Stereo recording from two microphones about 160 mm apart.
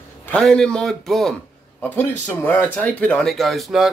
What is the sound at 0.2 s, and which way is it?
A man's voice, 5° left (ahead or behind).